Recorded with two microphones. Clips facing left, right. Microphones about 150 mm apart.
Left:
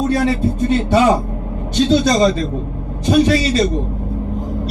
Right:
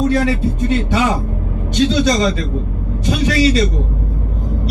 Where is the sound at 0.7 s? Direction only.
40° left (ahead or behind).